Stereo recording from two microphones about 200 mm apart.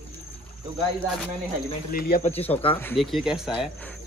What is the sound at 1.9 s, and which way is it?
Speech, 45° left (ahead or behind).